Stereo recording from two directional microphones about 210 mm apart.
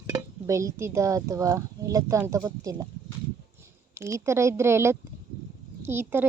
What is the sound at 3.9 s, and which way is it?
A woman's voice, 15° right (ahead or behind).